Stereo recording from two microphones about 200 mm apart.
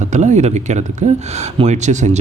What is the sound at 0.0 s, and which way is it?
Speech, 35° right (ahead or behind).